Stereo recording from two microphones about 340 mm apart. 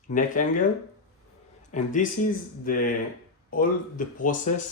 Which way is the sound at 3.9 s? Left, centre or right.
Left.